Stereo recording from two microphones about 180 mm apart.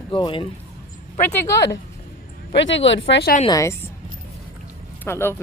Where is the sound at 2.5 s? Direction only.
90° left.